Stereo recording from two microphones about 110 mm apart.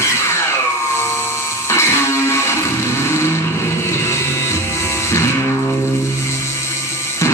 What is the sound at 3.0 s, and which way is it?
Vehicle, 25° left (ahead or behind).